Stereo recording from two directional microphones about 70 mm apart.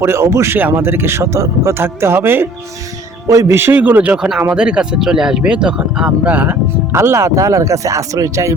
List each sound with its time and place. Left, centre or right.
0.0 s speech: right
3.2 s speech: right
3.5 s speech: right
3.8 s speech: right
4.5 s speech: centre
6.1 s speech: right
6.9 s speech: right